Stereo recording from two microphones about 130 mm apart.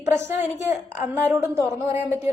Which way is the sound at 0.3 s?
15° right (ahead or behind).